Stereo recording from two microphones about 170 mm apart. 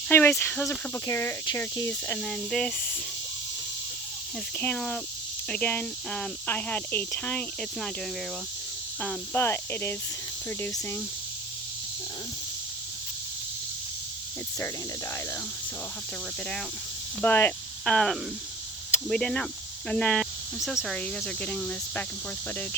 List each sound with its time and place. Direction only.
0.1 s speech: 15° left (ahead or behind)
2.1 s speech: 5° left (ahead or behind)
4.5 s speech: 10° left (ahead or behind)
9.0 s speech: 10° left (ahead or behind)
17.2 s speech: 10° left (ahead or behind)